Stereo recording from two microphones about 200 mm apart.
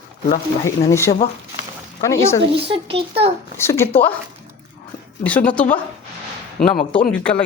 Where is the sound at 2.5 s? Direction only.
25° right (ahead or behind).